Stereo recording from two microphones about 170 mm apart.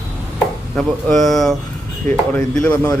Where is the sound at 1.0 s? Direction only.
Centre (ahead or behind).